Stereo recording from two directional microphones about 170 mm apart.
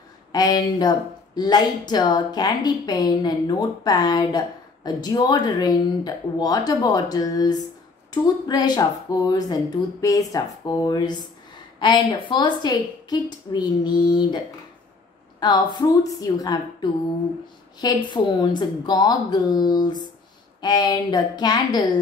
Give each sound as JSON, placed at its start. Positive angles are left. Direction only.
{"t": 0.3, "sound": "a woman's voice", "side_deg": 25}
{"t": 15.4, "sound": "a woman's voice", "side_deg": 25}